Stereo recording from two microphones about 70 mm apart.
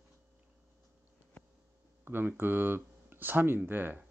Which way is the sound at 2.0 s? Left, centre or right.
Right.